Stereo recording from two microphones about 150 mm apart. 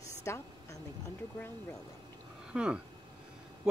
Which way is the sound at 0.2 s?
20° left (ahead or behind).